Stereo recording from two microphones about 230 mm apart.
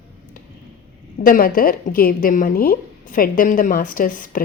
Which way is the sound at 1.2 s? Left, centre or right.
Left.